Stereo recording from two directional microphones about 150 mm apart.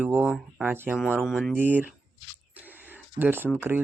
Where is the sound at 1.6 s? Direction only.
10° right (ahead or behind).